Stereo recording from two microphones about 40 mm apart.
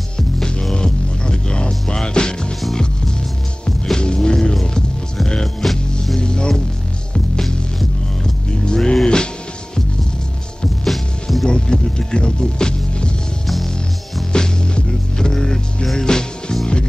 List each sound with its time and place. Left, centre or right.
0.7 s music: left
4.0 s music: left
6.1 s music: left
8.2 s music: centre
10.8 s music: centre
11.4 s music: left
14.3 s music: centre